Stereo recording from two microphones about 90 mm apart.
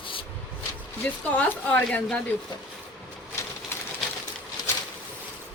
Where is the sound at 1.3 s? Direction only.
15° left (ahead or behind).